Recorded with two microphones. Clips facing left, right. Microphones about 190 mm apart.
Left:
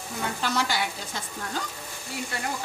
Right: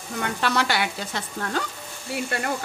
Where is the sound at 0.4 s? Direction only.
65° right (ahead or behind).